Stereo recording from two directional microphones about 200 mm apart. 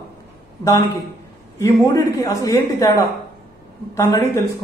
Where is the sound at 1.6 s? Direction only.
15° left (ahead or behind).